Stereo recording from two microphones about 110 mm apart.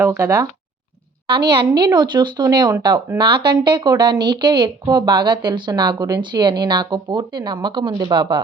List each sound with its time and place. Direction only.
0.2 s speech: 30° right (ahead or behind)
1.3 s a woman's voice: 45° right (ahead or behind)